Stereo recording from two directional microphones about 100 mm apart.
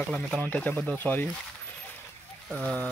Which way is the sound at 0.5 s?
15° left (ahead or behind).